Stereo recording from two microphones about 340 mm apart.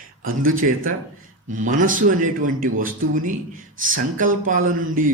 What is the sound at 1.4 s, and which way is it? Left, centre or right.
A man's voice, right.